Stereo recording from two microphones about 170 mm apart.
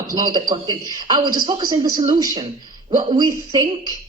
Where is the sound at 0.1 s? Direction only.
20° right (ahead or behind).